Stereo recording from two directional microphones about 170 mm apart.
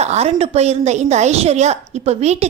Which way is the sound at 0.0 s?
40° right (ahead or behind).